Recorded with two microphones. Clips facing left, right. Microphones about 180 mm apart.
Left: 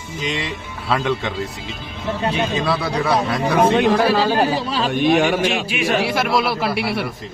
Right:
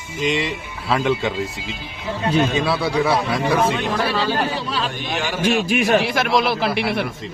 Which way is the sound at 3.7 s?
35° left (ahead or behind).